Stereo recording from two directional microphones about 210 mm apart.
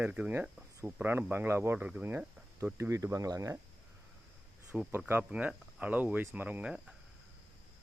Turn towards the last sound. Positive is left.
turn(degrees=-5)  # may be behind; listen again after turning